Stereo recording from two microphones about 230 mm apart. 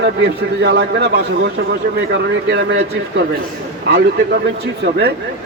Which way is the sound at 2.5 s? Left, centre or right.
Right.